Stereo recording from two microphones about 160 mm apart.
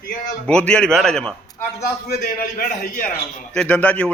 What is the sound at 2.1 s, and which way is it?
Speech, 85° left.